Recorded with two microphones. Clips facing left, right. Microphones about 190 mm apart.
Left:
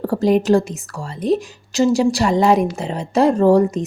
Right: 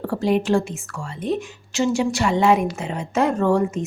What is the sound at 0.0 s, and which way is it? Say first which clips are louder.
A woman's voice: left 4 dB; 40° left (ahead or behind).